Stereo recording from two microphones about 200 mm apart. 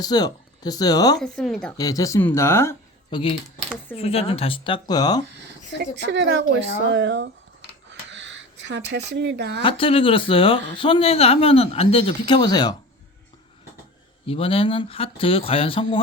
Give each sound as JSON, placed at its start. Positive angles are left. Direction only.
{"t": 0.0, "sound": "a man's voice", "side_deg": 20}
{"t": 1.2, "sound": "speech", "side_deg": 0}
{"t": 1.8, "sound": "speech", "side_deg": 15}
{"t": 3.9, "sound": "a man's voice", "side_deg": 30}
{"t": 6.1, "sound": "speech", "side_deg": -65}
{"t": 7.9, "sound": "a sound", "side_deg": -65}
{"t": 9.6, "sound": "a man's voice", "side_deg": 25}
{"t": 14.3, "sound": "a man's voice", "side_deg": 30}